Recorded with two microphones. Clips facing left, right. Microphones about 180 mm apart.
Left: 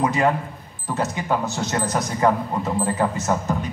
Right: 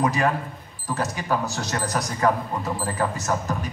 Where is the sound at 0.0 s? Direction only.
20° left (ahead or behind).